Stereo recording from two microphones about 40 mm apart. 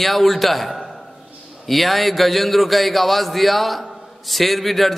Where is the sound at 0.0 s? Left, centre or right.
Centre.